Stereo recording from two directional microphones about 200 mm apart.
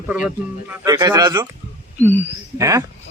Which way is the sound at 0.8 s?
20° right (ahead or behind).